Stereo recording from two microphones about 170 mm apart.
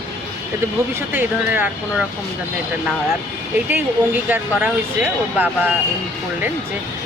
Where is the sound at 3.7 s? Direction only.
10° right (ahead or behind).